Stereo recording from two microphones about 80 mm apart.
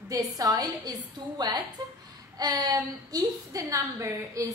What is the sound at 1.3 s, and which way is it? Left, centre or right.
A woman's voice, right.